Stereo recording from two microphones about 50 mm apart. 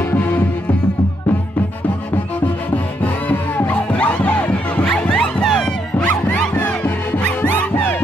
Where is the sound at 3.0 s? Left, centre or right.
Left.